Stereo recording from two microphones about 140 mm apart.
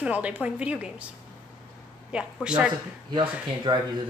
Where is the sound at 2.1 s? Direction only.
5° right (ahead or behind).